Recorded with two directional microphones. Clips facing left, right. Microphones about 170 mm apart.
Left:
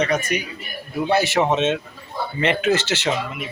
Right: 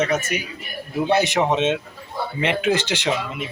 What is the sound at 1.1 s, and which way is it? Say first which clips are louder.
Speech: left 1 dB; 20° right (ahead or behind).